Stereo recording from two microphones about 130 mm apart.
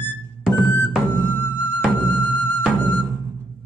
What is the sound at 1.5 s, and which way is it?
Music, 15° left (ahead or behind).